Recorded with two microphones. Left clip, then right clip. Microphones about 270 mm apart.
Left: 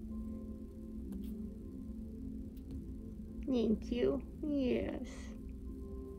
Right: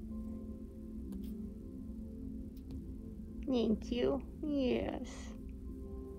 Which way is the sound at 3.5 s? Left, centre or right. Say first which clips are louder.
Right 1 dB; right.